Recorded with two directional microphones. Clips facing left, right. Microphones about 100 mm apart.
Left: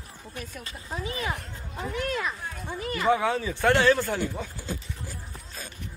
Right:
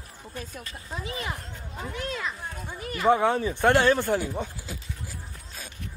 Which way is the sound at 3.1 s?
20° right (ahead or behind).